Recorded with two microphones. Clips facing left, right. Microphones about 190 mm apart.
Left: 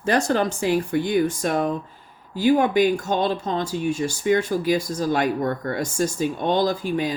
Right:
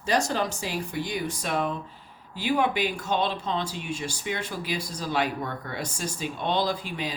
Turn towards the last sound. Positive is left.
turn(degrees=45)  # may be behind; listen again after turning